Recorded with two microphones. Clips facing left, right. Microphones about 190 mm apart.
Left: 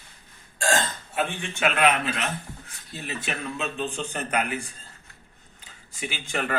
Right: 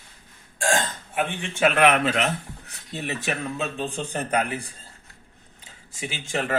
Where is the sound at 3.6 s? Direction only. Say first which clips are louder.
Right 1 dB; 30° right (ahead or behind).